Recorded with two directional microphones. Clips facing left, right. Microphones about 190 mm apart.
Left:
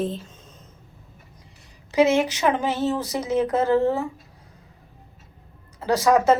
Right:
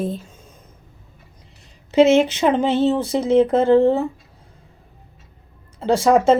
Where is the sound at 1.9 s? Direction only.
25° right (ahead or behind).